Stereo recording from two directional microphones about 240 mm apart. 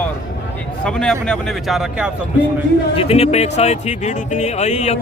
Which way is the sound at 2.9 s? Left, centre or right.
Left.